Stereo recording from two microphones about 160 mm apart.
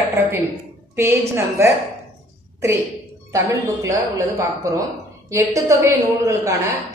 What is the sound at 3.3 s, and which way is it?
Speech, 20° right (ahead or behind).